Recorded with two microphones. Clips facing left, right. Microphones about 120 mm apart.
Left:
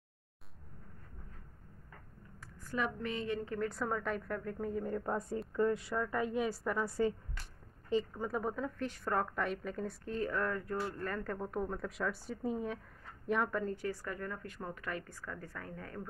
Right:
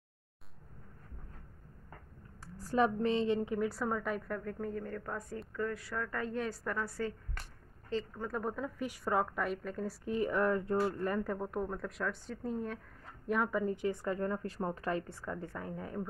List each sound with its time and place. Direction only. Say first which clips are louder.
2.4 s speech: right 7 dB; 35° right (ahead or behind)
3.5 s a woman's voice: right 2 dB; 5° right (ahead or behind); by 7.2 s 15° left (ahead or behind)
7.4 s a sound: right 2 dB; 55° right (ahead or behind)
7.9 s a woman's voice: left 3 dB; 10° left (ahead or behind)
10.0 s a woman's voice: right 5 dB; 15° right (ahead or behind)